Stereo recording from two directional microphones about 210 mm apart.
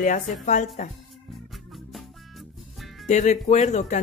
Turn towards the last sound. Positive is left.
turn(degrees=35)  # may be behind; listen again after turning